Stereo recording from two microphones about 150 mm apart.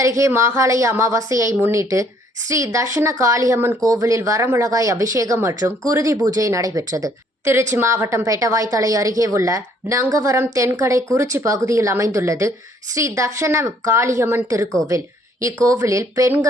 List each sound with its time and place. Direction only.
0.0 s a woman's voice: 20° right (ahead or behind)